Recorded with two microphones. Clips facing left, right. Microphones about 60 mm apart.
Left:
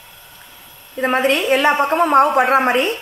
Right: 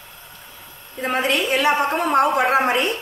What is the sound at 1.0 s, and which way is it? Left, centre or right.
A woman's voice, left.